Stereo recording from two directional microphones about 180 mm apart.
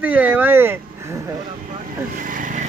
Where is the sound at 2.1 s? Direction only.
50° right (ahead or behind).